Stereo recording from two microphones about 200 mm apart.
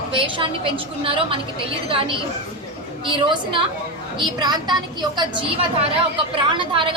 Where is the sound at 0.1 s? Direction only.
25° right (ahead or behind).